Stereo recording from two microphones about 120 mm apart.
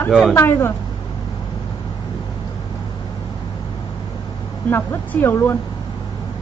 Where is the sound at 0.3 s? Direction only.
20° left (ahead or behind).